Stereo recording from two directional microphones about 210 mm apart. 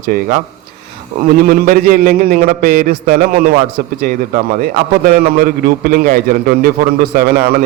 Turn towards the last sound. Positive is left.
turn(degrees=-50)  # may be behind; listen again after turning